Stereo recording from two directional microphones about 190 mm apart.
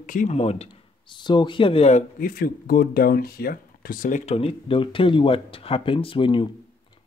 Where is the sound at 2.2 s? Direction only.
50° left (ahead or behind).